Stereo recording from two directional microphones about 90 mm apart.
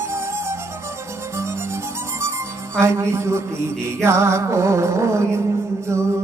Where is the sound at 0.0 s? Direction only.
30° right (ahead or behind).